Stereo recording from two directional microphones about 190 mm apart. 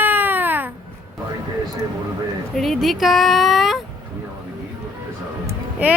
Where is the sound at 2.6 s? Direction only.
Centre (ahead or behind).